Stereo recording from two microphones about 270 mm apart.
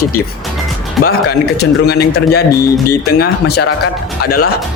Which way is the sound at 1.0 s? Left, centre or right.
Left.